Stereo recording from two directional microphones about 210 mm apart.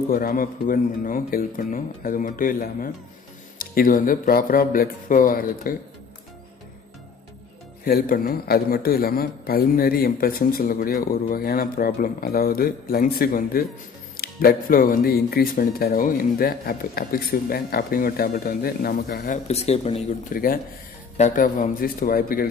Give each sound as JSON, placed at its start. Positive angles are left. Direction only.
{"t": 0.1, "sound": "a man's voice", "side_deg": 40}
{"t": 7.8, "sound": "speech", "side_deg": 45}
{"t": 20.3, "sound": "speech", "side_deg": 45}